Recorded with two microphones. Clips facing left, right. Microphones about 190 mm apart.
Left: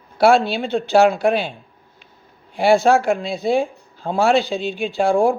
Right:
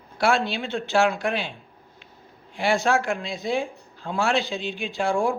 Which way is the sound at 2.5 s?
35° left (ahead or behind).